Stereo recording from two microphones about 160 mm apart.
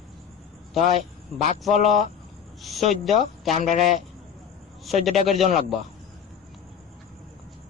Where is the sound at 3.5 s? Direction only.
50° left (ahead or behind).